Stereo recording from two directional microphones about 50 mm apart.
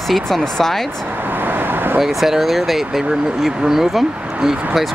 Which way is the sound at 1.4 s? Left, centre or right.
Right.